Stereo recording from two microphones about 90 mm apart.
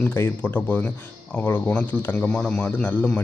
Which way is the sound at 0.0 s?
15° left (ahead or behind).